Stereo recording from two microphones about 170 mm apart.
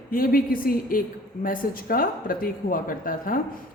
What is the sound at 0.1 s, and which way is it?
A woman's voice, 55° left (ahead or behind).